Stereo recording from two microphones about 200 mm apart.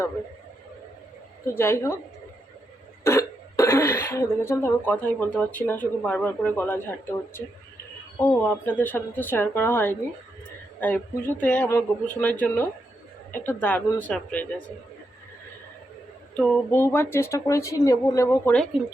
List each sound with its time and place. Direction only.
1.5 s speech: 10° left (ahead or behind)
3.0 s speech: 15° left (ahead or behind)
16.4 s speech: 10° left (ahead or behind)